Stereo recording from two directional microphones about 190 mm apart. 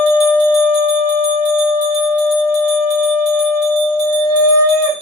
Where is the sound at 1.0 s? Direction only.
50° right (ahead or behind).